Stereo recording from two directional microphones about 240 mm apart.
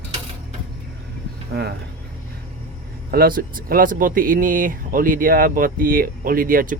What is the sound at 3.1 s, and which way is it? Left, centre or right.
Speech, right.